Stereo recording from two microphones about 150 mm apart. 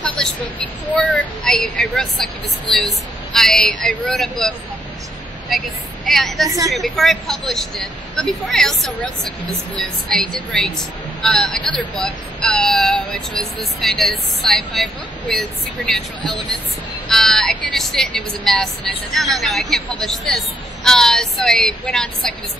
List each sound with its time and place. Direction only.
0.0 s a sound: 10° left (ahead or behind)
0.9 s a woman's voice: centre (ahead or behind)
3.3 s a woman's voice: centre (ahead or behind)